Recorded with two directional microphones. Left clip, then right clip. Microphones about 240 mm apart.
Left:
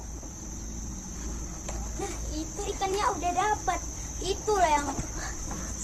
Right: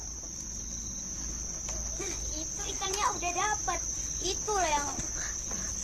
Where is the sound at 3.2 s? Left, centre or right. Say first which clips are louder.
Left 4 dB; left.